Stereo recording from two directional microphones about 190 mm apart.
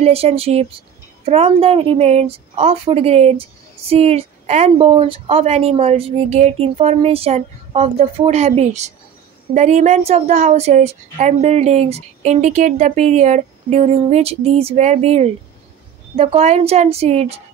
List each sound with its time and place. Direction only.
0.0 s a woman's voice: 30° right (ahead or behind)